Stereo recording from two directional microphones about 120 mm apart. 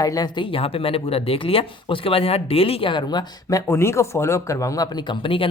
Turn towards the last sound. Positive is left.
turn(degrees=50)  # may be behind; listen again after turning